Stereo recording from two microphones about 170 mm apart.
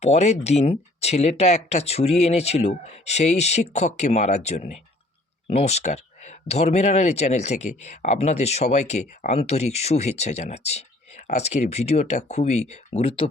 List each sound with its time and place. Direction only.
0.0 s speech: 40° left (ahead or behind)